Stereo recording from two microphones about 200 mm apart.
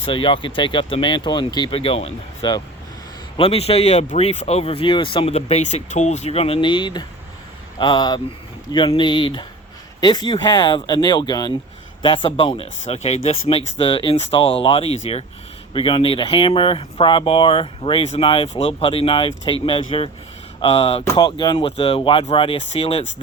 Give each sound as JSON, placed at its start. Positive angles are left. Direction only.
{"t": 0.0, "sound": "speech", "side_deg": 25}